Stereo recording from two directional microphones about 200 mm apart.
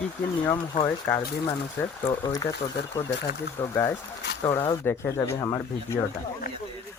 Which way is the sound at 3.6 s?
15° left (ahead or behind).